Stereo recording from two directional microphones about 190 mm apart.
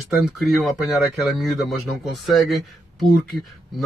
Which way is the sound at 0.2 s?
Centre (ahead or behind).